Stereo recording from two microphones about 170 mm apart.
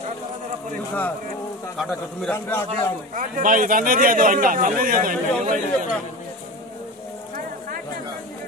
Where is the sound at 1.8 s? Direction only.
Centre (ahead or behind).